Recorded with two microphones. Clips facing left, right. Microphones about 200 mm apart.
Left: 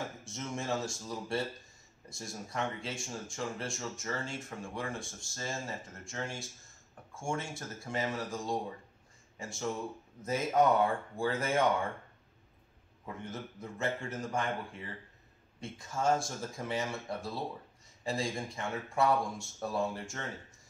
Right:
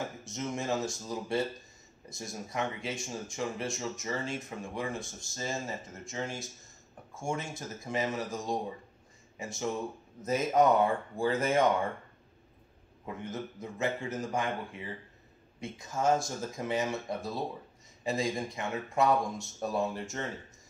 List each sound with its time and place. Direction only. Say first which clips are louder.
0.2 s speech: right 4 dB; 20° right (ahead or behind)
13.0 s speech: right 4 dB; 20° right (ahead or behind)